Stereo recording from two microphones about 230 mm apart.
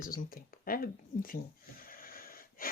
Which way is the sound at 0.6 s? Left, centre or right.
Left.